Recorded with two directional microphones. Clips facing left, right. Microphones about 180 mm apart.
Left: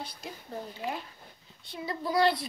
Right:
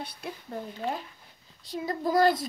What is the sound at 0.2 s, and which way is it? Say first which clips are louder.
Speech: right 7 dB; 60° right (ahead or behind).